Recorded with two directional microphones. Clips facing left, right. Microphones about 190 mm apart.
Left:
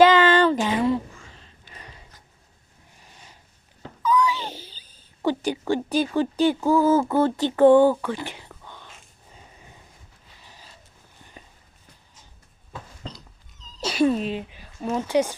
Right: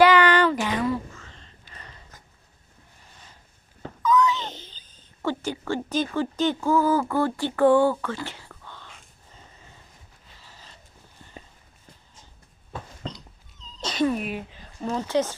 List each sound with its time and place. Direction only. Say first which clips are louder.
0.0 s a sound: left 2 dB; 20° left (ahead or behind)
1.2 s a sound: even; 10° left (ahead or behind)
1.7 s dog: left 2 dB; 15° left (ahead or behind)
4.0 s speech: right 1 dB; 10° left (ahead or behind)
8.9 s dog: left 1 dB; 15° left (ahead or behind)
10.4 s a sound: left 1 dB; 15° left (ahead or behind)
13.6 s cat: left 3 dB; 10° left (ahead or behind)
14.0 s speech: left 3 dB; 30° left (ahead or behind)
14.5 s a woman's voice: left 2 dB; 10° left (ahead or behind)